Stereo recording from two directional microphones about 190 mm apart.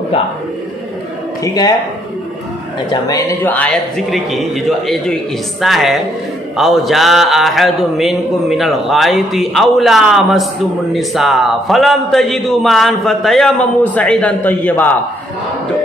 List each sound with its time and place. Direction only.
1.4 s speech: 20° left (ahead or behind)
2.9 s a man's voice: 20° left (ahead or behind); by 5.1 s centre (ahead or behind)
5.6 s a sound: centre (ahead or behind)